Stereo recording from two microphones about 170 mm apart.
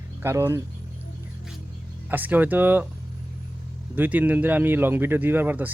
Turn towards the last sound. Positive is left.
turn(degrees=-10)  # may be behind; listen again after turning